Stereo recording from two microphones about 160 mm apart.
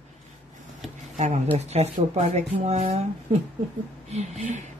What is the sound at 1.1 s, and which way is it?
Speech, 45° right (ahead or behind).